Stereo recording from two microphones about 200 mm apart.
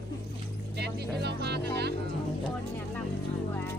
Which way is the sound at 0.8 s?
55° right (ahead or behind).